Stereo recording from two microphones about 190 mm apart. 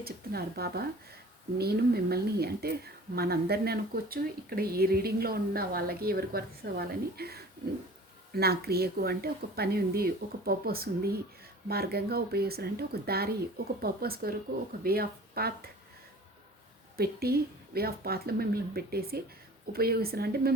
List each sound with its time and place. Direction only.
0.0 s speech: 55° right (ahead or behind)
17.0 s speech: 55° right (ahead or behind)